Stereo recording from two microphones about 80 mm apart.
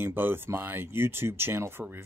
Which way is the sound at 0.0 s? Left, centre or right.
Right.